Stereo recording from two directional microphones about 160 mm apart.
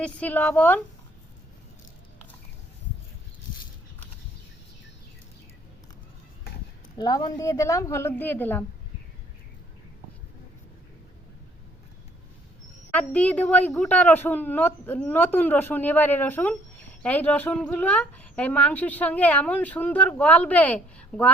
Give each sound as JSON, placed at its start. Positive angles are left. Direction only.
{"t": 0.0, "sound": "speech", "side_deg": 10}
{"t": 7.0, "sound": "a woman's voice", "side_deg": 25}
{"t": 12.9, "sound": "speech", "side_deg": 10}